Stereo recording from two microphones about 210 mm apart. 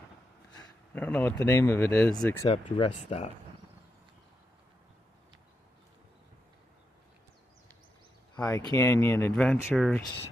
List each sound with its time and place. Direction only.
0.9 s speech: 5° left (ahead or behind)
2.4 s speech: 25° left (ahead or behind)
8.4 s speech: 5° left (ahead or behind)